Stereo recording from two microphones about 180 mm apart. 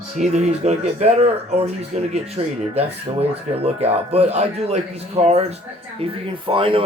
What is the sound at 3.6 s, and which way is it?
Speech, 35° right (ahead or behind).